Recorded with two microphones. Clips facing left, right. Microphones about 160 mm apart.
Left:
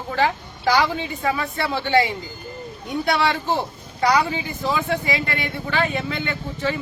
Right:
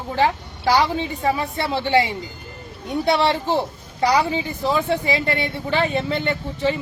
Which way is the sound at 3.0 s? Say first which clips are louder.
Right 2 dB; 30° right (ahead or behind).